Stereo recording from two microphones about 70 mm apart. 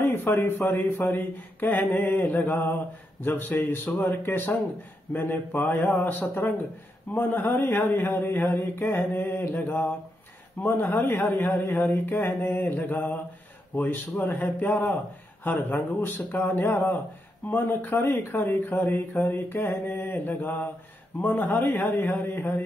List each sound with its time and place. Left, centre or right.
0.0 s a man's voice: left